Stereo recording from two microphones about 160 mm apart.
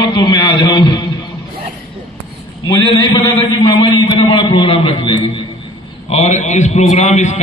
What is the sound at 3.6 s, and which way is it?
A man's voice, 25° left (ahead or behind).